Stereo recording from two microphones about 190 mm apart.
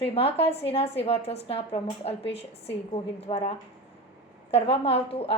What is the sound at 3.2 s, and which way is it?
Speech, 30° left (ahead or behind).